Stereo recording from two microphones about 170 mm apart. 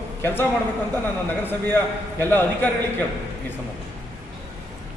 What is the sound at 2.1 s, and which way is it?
Speech, 10° left (ahead or behind).